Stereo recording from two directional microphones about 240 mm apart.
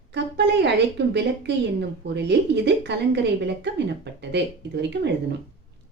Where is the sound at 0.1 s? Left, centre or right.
Right.